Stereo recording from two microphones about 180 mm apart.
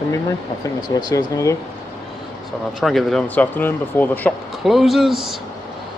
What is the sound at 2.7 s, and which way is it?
Speech, centre (ahead or behind).